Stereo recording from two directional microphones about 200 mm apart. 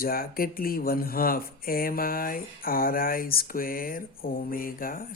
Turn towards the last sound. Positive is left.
turn(degrees=45)  # may be behind; listen again after turning